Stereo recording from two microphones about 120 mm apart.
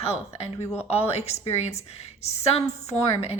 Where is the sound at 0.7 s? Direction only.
60° left (ahead or behind).